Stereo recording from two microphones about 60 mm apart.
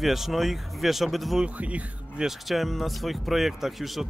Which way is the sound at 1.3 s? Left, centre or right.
Right.